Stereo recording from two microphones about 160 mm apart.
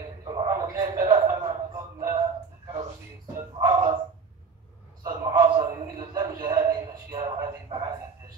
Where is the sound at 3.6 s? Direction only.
25° right (ahead or behind).